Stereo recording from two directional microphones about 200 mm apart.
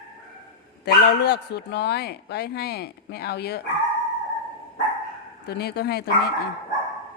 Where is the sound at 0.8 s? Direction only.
55° left (ahead or behind).